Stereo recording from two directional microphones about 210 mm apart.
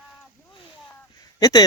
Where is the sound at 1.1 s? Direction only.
20° left (ahead or behind).